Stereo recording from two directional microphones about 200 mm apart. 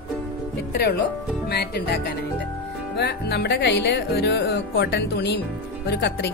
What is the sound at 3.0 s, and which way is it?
Speech, 55° left (ahead or behind).